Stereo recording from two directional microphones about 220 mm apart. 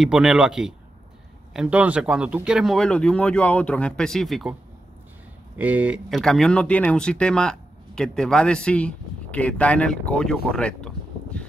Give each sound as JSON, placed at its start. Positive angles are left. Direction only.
{"t": 0.0, "sound": "speech", "side_deg": 0}
{"t": 5.6, "sound": "speech", "side_deg": -5}